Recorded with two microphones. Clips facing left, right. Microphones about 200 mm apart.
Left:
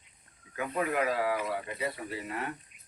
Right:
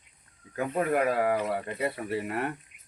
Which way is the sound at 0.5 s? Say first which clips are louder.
Right 4 dB; 45° right (ahead or behind).